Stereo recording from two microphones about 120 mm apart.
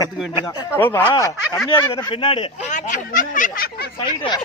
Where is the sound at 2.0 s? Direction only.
40° left (ahead or behind).